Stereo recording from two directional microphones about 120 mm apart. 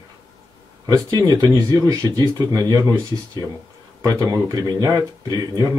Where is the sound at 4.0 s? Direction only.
30° right (ahead or behind).